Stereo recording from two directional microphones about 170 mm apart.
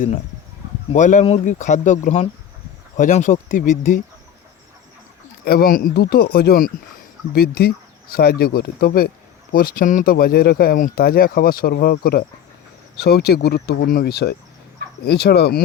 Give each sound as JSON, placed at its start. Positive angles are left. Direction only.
{"t": 0.9, "sound": "speech", "side_deg": 50}
{"t": 5.5, "sound": "speech", "side_deg": 60}